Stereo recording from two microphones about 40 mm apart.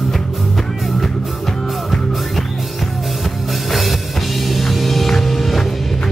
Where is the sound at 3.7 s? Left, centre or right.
Centre.